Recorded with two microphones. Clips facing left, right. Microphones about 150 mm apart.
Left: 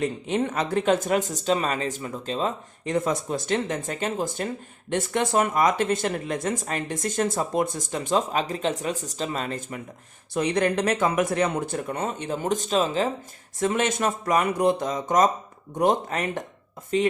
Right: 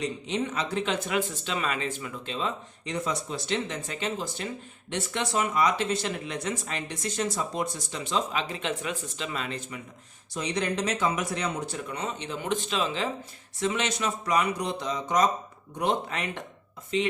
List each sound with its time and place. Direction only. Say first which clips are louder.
0.0 s speech: left 5 dB; 50° left (ahead or behind)